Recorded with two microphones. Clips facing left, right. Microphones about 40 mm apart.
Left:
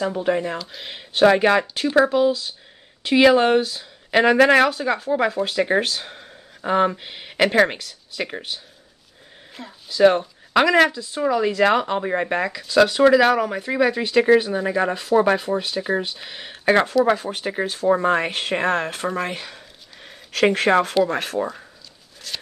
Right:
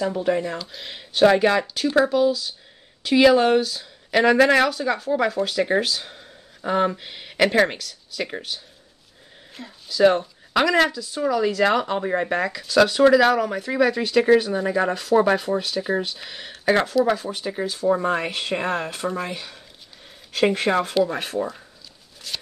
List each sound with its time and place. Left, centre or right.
0.0 s speech: centre
0.6 s speech: centre; by 1.9 s left
3.0 s speech: left
5.8 s speech: left
6.6 s speech: centre
7.7 s speech: left
9.8 s speech: left
12.4 s speech: centre; by 16.8 s left
17.0 s speech: left
20.1 s speech: left
22.3 s a sound: centre